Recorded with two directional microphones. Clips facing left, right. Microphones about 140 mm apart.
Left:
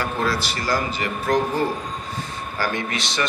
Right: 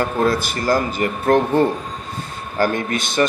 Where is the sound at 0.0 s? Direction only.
50° right (ahead or behind).